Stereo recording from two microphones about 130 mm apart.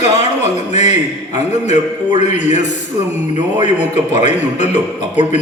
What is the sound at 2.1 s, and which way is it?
Speech, 65° left (ahead or behind).